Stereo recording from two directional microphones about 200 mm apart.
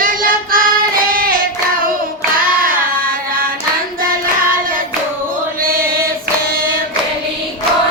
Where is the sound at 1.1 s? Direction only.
45° right (ahead or behind).